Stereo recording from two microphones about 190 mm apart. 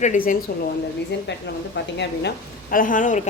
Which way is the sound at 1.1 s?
65° left (ahead or behind).